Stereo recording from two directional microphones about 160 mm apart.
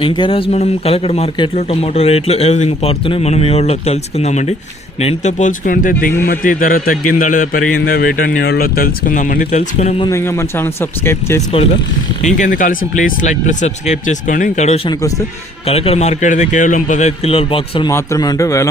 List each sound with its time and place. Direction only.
0.0 s a man's voice: 30° left (ahead or behind); by 9.6 s 60° left (ahead or behind)
9.6 s speech: 45° left (ahead or behind)
10.1 s speech: 15° left (ahead or behind)
12.2 s speech: 55° left (ahead or behind); by 17.9 s 35° left (ahead or behind)
17.9 s a man's voice: 20° left (ahead or behind)